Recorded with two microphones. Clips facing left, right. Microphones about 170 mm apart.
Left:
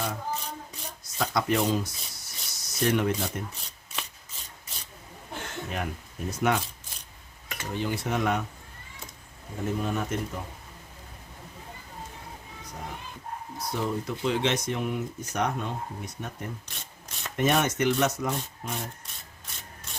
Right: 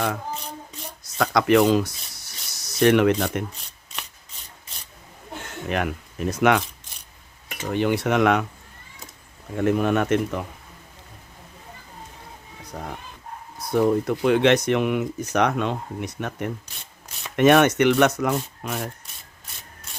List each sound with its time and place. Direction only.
1.2 s speech: 90° right
5.6 s speech: 85° right
7.7 s speech: 70° right (ahead or behind)
9.6 s speech: 75° right (ahead or behind)
13.7 s speech: 55° right (ahead or behind); by 18.9 s 75° right (ahead or behind)